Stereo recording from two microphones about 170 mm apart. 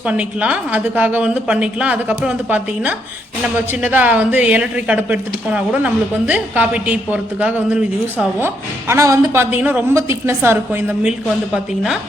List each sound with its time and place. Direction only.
0.1 s speech: 10° right (ahead or behind)
11.5 s speech: centre (ahead or behind)